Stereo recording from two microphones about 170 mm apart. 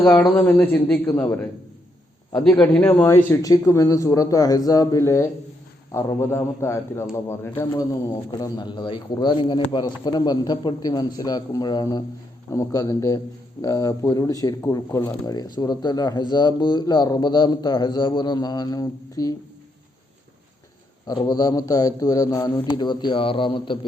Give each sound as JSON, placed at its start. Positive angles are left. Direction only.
{"t": 0.0, "sound": "a man's voice", "side_deg": 10}
{"t": 21.2, "sound": "a man's voice", "side_deg": 20}